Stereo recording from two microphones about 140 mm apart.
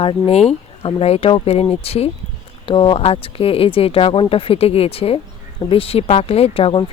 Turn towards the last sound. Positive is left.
turn(degrees=40)  # may be behind; listen again after turning